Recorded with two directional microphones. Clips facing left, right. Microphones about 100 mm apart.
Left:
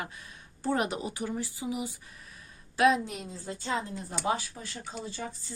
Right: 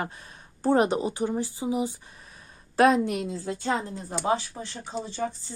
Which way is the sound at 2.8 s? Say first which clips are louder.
Right 4 dB; 50° right (ahead or behind).